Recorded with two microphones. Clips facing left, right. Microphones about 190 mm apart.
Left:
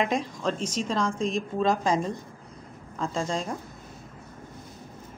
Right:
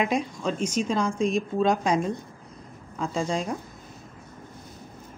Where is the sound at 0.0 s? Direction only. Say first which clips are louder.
Right 1 dB; 5° right (ahead or behind).